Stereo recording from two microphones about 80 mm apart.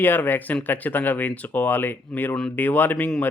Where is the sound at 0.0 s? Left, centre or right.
Left.